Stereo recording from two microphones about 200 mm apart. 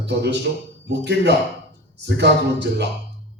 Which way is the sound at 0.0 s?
60° right (ahead or behind).